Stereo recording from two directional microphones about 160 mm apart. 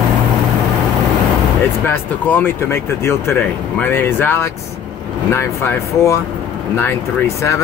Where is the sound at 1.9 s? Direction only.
10° left (ahead or behind).